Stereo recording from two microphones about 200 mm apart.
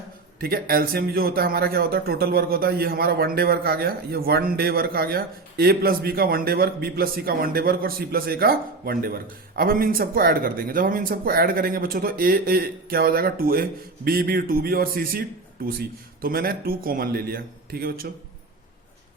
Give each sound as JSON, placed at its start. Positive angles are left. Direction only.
{"t": 0.3, "sound": "speech", "side_deg": -50}